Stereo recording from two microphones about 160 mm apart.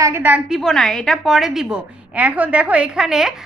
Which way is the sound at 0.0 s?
15° right (ahead or behind).